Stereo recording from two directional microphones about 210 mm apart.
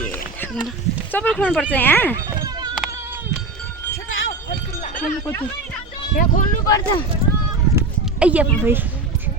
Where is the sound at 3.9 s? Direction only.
40° left (ahead or behind).